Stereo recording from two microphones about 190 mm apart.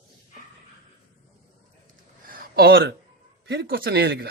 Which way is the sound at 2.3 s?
55° right (ahead or behind).